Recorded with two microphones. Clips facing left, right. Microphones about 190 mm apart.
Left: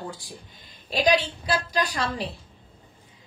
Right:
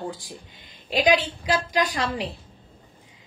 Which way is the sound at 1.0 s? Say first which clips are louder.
Right 1 dB; 15° right (ahead or behind).